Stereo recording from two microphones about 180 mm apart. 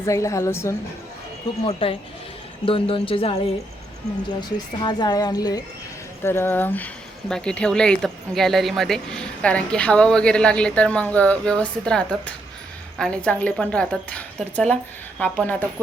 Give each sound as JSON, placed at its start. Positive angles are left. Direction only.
{"t": 0.0, "sound": "a woman's voice", "side_deg": 15}
{"t": 1.6, "sound": "a woman's voice", "side_deg": 30}